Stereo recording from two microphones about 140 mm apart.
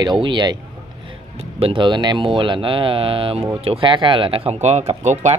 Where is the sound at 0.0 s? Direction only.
35° right (ahead or behind).